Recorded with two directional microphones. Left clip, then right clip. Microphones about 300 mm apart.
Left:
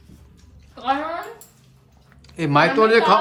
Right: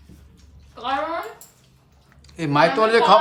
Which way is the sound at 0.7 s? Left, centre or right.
Centre.